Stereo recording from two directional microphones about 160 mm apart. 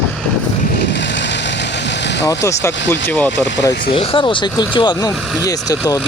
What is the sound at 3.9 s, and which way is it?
Speech, 35° left (ahead or behind).